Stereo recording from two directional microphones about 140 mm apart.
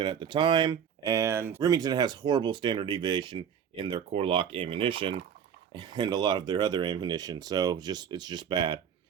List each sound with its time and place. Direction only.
0.0 s speech: 35° right (ahead or behind)